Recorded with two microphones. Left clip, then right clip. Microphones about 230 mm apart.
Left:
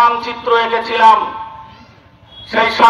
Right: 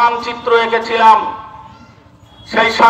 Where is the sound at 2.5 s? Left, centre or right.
Right.